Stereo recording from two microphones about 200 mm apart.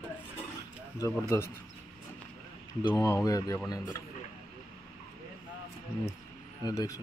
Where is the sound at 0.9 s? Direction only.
15° left (ahead or behind).